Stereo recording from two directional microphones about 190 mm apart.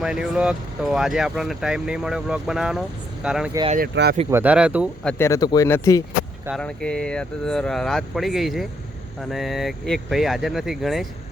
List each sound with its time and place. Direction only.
0.0 s speech: 5° right (ahead or behind)
3.8 s speech: 55° right (ahead or behind)
4.3 s speech: 10° right (ahead or behind)
5.0 s speech: 10° left (ahead or behind)